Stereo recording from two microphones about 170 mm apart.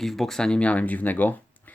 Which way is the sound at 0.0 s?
Centre (ahead or behind).